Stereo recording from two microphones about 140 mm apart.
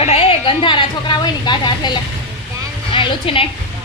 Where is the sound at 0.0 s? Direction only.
45° left (ahead or behind).